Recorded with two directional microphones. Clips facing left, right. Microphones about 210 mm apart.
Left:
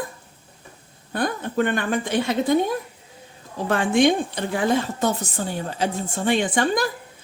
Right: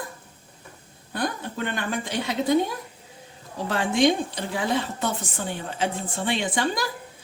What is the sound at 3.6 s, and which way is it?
A woman's voice, 55° left (ahead or behind).